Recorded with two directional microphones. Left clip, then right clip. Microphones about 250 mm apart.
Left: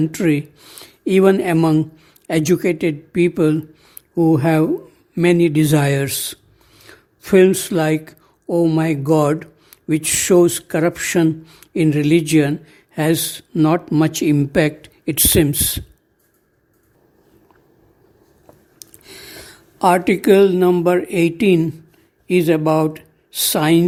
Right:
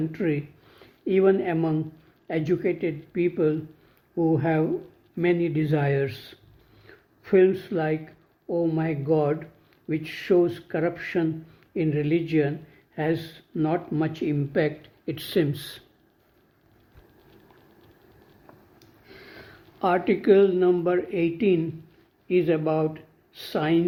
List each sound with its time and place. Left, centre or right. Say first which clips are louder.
0.1 s speech: left 9 dB; left
18.8 s a woman's voice: left 11 dB; left